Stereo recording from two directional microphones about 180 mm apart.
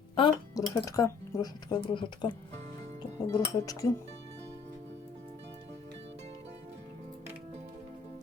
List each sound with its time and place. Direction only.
0.2 s speech: 25° left (ahead or behind)